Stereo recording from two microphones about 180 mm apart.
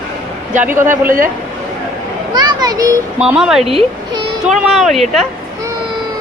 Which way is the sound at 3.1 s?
5° right (ahead or behind).